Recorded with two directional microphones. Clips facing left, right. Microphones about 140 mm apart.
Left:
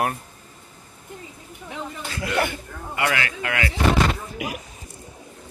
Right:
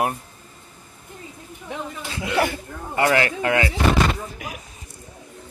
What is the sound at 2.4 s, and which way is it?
Speech, 35° right (ahead or behind).